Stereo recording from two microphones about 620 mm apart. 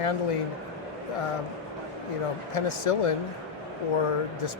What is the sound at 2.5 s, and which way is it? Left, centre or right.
Speech, left.